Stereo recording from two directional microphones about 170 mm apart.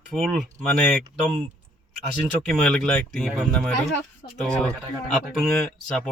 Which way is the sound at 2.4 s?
5° left (ahead or behind).